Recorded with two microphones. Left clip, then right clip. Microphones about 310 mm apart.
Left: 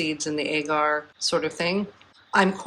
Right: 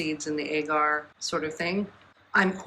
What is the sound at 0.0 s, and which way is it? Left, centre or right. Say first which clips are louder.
Speech: left 4 dB; centre.